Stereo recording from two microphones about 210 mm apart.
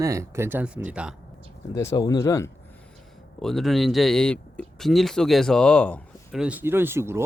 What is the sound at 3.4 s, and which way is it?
Speech, centre (ahead or behind).